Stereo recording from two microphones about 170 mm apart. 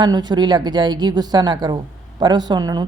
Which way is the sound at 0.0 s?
25° right (ahead or behind).